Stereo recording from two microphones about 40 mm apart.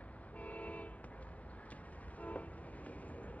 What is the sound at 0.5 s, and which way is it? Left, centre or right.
Vehicle, left.